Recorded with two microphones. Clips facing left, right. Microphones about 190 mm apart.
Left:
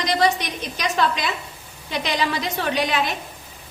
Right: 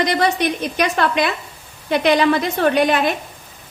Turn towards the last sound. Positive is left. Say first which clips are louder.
# right 7 dB
turn(degrees=-55)  # may be behind; listen again after turning